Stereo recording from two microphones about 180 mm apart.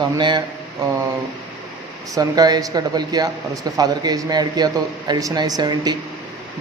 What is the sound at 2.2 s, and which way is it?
Speech, 20° right (ahead or behind).